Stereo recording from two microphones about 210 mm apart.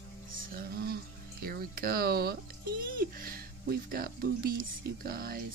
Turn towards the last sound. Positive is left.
turn(degrees=-45)  # may be behind; listen again after turning